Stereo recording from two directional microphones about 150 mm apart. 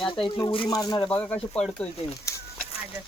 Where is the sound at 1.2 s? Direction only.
10° left (ahead or behind).